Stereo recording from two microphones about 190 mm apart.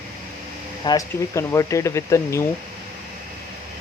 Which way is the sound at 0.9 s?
15° left (ahead or behind).